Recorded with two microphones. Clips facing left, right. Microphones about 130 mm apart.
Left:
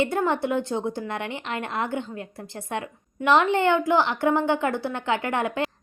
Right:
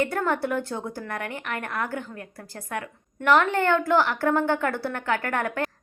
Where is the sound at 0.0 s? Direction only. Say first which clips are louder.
Left 2 dB; 20° left (ahead or behind).